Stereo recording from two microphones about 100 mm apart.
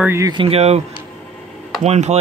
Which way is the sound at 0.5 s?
90° right.